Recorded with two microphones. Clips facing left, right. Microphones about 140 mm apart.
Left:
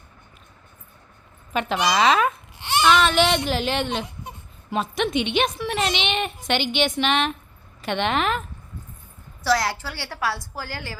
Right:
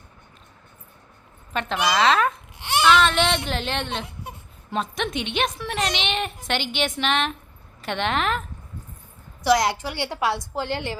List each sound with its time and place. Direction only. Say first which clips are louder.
1.5 s a woman's voice: left 1 dB; 5° left (ahead or behind)
2.6 s a sound: left 1 dB; 10° right (ahead or behind)
2.8 s a woman's voice: left 1 dB; 5° left (ahead or behind)
9.4 s a woman's voice: right 3 dB; 20° right (ahead or behind)